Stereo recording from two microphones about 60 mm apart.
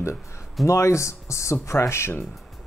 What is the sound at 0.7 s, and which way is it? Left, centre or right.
Speech, left.